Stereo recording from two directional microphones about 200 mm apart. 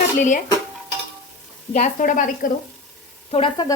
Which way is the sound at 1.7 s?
40° left (ahead or behind).